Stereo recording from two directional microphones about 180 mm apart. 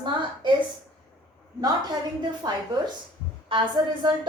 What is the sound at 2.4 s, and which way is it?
Speech, 25° right (ahead or behind).